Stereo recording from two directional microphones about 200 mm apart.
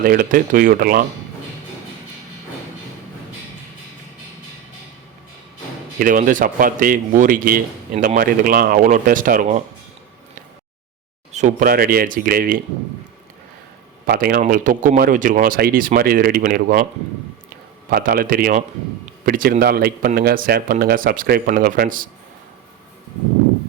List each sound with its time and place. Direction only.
0.0 s speech: 45° right (ahead or behind)
6.0 s speech: 45° right (ahead or behind)
11.3 s speech: 35° right (ahead or behind)
14.1 s speech: 50° right (ahead or behind)
17.9 s speech: 45° right (ahead or behind)